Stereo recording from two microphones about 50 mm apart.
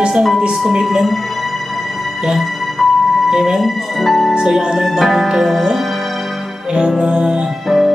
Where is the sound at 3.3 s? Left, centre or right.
Centre.